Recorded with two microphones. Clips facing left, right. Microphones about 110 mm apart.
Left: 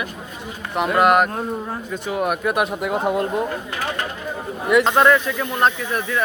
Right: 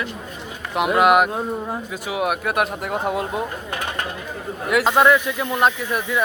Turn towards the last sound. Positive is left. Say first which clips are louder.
# even
turn(degrees=-5)  # may be behind; listen again after turning